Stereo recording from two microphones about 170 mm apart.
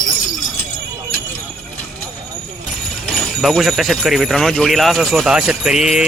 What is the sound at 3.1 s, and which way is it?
Speech, centre (ahead or behind).